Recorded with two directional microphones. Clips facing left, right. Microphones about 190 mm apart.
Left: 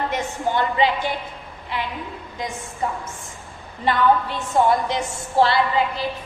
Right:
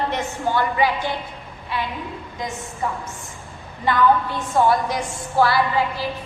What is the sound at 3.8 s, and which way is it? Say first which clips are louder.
A woman's voice: right 1 dB; 25° left (ahead or behind).